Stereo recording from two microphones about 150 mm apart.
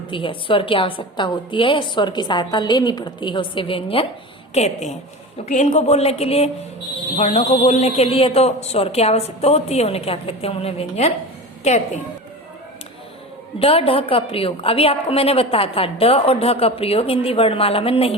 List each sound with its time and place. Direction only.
0.1 s a woman's voice: 35° left (ahead or behind)
13.6 s a woman's voice: 40° left (ahead or behind)